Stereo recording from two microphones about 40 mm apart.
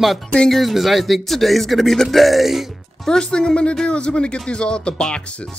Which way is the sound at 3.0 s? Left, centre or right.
Centre.